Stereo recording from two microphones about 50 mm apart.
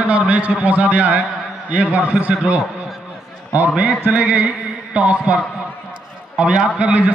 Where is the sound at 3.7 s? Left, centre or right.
Right.